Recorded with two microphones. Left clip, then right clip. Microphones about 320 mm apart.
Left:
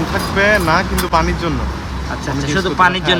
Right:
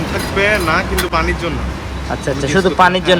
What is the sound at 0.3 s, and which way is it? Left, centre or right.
Speech, left.